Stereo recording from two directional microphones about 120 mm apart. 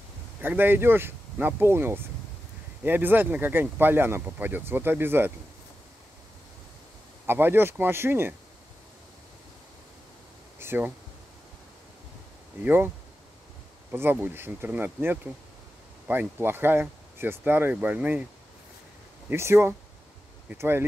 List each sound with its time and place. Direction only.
0.4 s speech: 15° right (ahead or behind)
7.2 s speech: 20° right (ahead or behind)
10.6 s a sound: 20° right (ahead or behind)
12.6 s speech: 20° right (ahead or behind)
13.9 s speech: 20° right (ahead or behind)
19.2 s speech: 20° right (ahead or behind)